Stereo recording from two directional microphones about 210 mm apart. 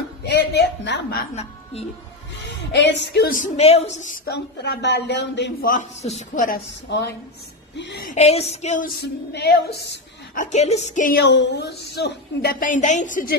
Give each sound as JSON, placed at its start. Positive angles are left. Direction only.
{"t": 0.2, "sound": "a woman's voice", "side_deg": 55}
{"t": 1.3, "sound": "a woman's voice", "side_deg": 30}
{"t": 2.7, "sound": "a woman's voice", "side_deg": 55}
{"t": 4.3, "sound": "a woman's voice", "side_deg": 55}
{"t": 5.7, "sound": "a woman's voice", "side_deg": 35}
{"t": 6.9, "sound": "a woman's voice", "side_deg": 55}
{"t": 8.1, "sound": "a woman's voice", "side_deg": 30}
{"t": 9.0, "sound": "a woman's voice", "side_deg": 50}
{"t": 11.2, "sound": "a woman's voice", "side_deg": 55}